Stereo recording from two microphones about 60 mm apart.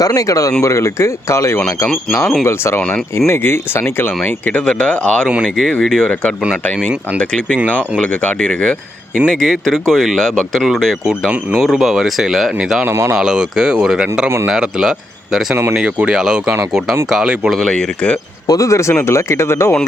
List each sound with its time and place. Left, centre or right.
0.0 s speech: left
0.6 s speech: left
4.6 s speech: centre
12.9 s speech: right
13.1 s speech: centre
15.7 s speech: centre
17.7 s speech: centre
18.4 s speech: left